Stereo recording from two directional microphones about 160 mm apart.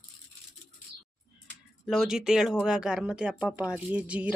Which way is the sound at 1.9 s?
5° right (ahead or behind).